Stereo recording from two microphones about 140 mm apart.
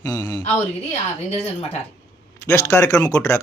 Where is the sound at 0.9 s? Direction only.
45° left (ahead or behind).